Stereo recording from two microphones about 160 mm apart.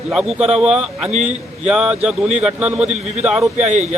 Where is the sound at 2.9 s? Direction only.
45° right (ahead or behind).